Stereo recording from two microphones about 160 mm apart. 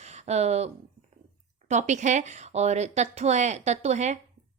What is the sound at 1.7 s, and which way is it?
Speech, 50° right (ahead or behind).